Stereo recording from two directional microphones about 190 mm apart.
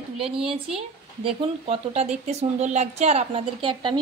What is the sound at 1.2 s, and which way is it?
A woman's voice, 30° right (ahead or behind).